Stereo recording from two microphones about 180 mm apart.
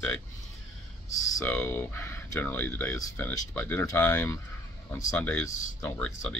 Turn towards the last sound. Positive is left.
turn(degrees=5)  # may be behind; listen again after turning